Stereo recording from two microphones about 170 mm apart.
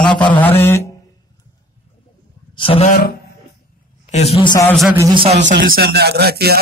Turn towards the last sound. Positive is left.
turn(degrees=-70)  # may be behind; listen again after turning